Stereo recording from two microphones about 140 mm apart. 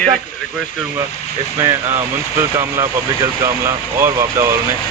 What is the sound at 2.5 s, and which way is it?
Speech, 20° right (ahead or behind).